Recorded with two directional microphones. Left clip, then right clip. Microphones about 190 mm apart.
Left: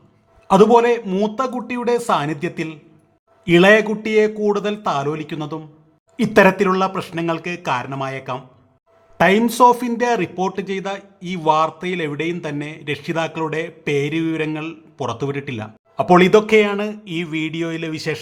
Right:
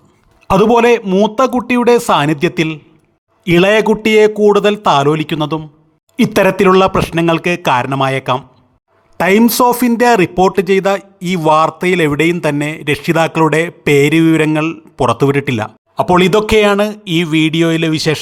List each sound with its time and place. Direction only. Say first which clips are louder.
0.4 s a man's voice: right 3 dB; 35° right (ahead or behind)
16.0 s a man's voice: right 2 dB; 30° right (ahead or behind)